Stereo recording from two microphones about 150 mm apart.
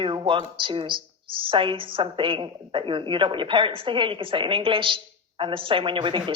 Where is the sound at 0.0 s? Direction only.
35° right (ahead or behind).